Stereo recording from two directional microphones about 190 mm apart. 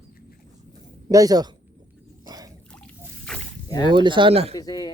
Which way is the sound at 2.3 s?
20° right (ahead or behind).